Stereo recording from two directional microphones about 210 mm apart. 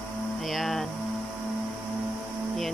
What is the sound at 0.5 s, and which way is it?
Hum, centre (ahead or behind).